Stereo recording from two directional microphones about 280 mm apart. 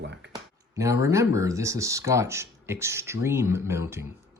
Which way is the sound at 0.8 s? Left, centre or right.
Centre.